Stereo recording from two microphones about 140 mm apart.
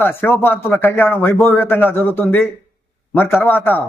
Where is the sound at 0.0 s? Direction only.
15° left (ahead or behind).